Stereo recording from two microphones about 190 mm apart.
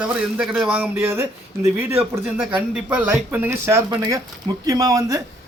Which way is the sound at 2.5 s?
10° right (ahead or behind).